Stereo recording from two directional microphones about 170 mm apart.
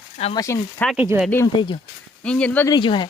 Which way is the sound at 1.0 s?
10° right (ahead or behind).